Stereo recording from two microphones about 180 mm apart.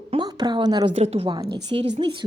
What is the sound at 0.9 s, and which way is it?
Speech, 35° right (ahead or behind).